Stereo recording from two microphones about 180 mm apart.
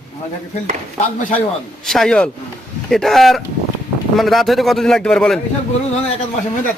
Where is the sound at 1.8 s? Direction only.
Centre (ahead or behind).